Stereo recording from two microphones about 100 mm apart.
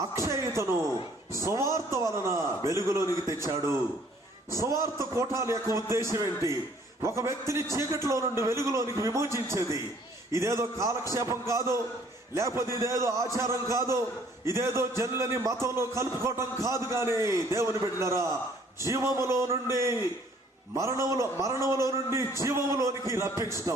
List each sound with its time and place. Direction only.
0.2 s a man's voice: 30° right (ahead or behind)